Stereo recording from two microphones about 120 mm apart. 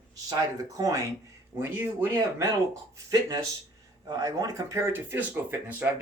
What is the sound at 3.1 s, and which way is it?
Speech, 30° right (ahead or behind).